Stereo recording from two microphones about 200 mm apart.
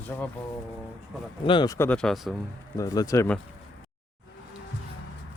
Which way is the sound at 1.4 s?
25° left (ahead or behind).